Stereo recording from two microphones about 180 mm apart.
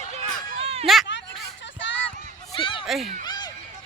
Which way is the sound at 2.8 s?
Centre (ahead or behind).